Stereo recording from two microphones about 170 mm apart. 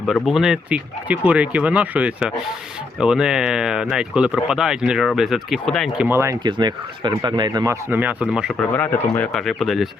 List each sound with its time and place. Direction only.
0.0 s speech: centre (ahead or behind)
8.7 s speech: 10° left (ahead or behind)